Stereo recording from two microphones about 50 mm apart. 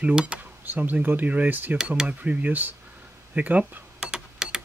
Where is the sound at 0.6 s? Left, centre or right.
Right.